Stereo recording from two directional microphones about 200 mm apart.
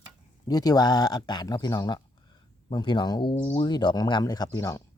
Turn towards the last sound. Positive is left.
turn(degrees=15)  # may be behind; listen again after turning